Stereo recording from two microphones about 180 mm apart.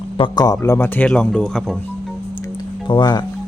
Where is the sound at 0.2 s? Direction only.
20° left (ahead or behind); by 1.6 s 5° left (ahead or behind).